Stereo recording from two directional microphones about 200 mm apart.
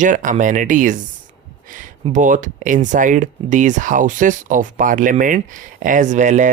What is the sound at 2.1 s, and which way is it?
Speech, 40° right (ahead or behind).